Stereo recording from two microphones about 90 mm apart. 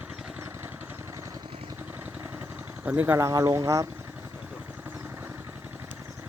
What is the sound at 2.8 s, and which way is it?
Speech, 20° right (ahead or behind).